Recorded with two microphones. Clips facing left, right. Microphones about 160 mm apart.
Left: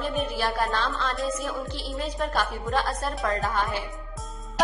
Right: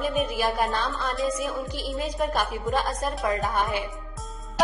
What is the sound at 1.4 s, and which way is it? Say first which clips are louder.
Music: right 2 dB; centre (ahead or behind).